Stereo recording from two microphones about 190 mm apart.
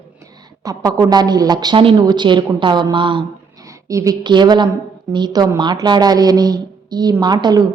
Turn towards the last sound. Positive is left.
turn(degrees=-20)  # may be behind; listen again after turning